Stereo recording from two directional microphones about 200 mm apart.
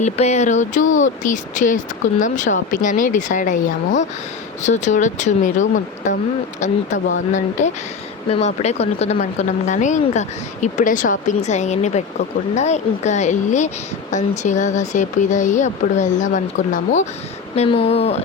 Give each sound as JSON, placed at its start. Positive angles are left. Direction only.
{"t": 0.0, "sound": "speech", "side_deg": 35}